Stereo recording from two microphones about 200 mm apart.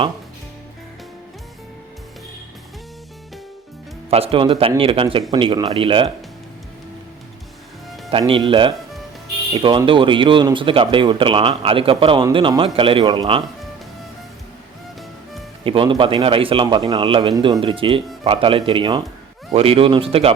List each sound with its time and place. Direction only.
4.1 s speech: 30° right (ahead or behind)
8.1 s speech: 25° right (ahead or behind)
15.6 s speech: 25° right (ahead or behind)